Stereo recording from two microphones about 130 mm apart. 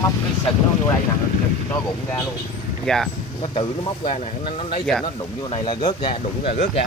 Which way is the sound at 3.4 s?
50° left (ahead or behind).